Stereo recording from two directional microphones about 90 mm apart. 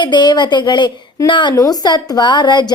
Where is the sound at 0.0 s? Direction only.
55° left (ahead or behind).